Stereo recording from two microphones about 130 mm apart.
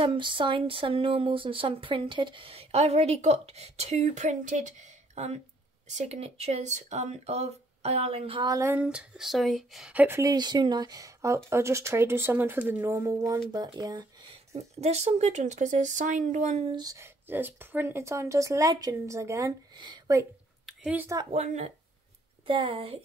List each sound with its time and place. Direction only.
0.0 s speech: 40° right (ahead or behind)
8.4 s speech: 30° right (ahead or behind)
8.6 s speech: 10° right (ahead or behind)
9.9 s speech: 20° right (ahead or behind)
10.3 s speech: 35° right (ahead or behind)
14.3 s speech: 55° right (ahead or behind)
16.6 s speech: 30° right (ahead or behind)
17.3 s speech: 15° right (ahead or behind)
19.8 s speech: 35° right (ahead or behind)
20.6 s a sound: 10° right (ahead or behind)
21.3 s speech: 55° right (ahead or behind)
22.5 s speech: 40° right (ahead or behind)